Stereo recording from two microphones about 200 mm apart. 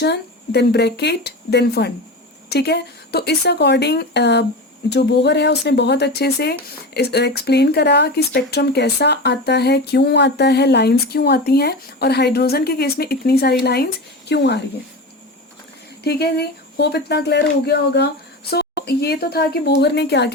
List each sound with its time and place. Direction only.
0.0 s speech: 55° left (ahead or behind)
16.0 s speech: 55° left (ahead or behind)